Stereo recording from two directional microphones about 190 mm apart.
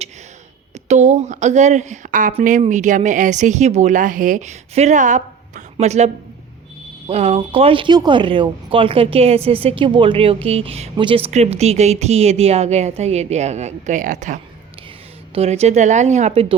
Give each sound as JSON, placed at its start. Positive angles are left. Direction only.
{"t": 0.9, "sound": "speech", "side_deg": -40}
{"t": 7.1, "sound": "speech", "side_deg": -35}